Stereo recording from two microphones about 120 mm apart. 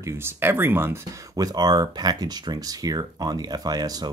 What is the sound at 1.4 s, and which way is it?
Speech, 35° right (ahead or behind).